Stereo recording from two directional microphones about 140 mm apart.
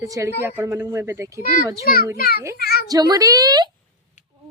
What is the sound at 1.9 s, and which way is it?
Speech, 90° left.